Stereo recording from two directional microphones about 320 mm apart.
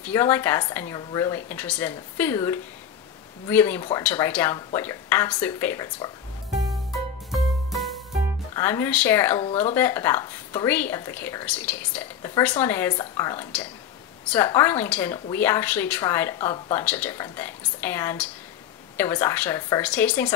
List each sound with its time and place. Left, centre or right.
0.0 s a woman's voice: centre
7.2 s music: centre
8.5 s a woman's voice: centre